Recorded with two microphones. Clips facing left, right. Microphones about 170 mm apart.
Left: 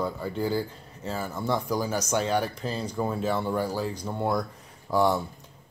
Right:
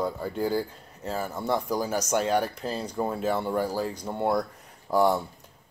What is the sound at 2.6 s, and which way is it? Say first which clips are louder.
Speech: even; 5° right (ahead or behind).